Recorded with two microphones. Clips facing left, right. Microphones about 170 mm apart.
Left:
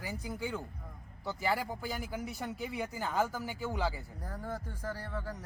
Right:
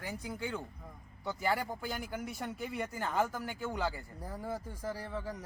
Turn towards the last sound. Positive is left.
turn(degrees=-10)  # may be behind; listen again after turning